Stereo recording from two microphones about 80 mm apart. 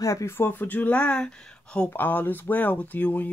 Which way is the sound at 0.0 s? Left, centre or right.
Left.